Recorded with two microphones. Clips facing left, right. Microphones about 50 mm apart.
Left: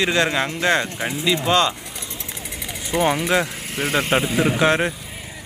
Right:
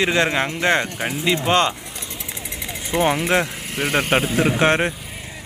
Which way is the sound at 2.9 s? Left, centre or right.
Centre.